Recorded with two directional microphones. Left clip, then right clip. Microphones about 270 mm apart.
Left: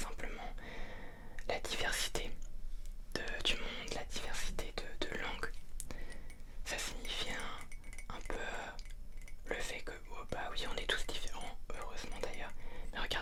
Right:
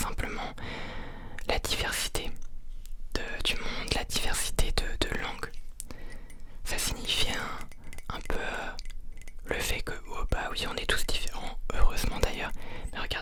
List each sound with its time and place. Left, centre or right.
0.0 s whispering: right; by 6.1 s centre
6.7 s whispering: right
11.7 s whispering: right
12.9 s whispering: right